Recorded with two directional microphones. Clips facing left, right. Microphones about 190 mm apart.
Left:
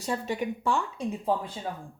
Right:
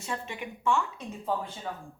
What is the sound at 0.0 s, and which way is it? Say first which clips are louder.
A woman's voice: left 6 dB; 35° left (ahead or behind).